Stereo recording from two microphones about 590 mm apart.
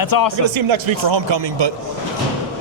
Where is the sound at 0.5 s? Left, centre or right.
Right.